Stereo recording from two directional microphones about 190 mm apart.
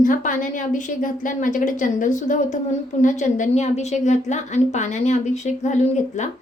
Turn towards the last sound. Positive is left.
turn(degrees=40)  # may be behind; listen again after turning